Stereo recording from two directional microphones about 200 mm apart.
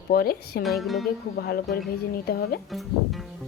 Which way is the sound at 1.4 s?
50° left (ahead or behind).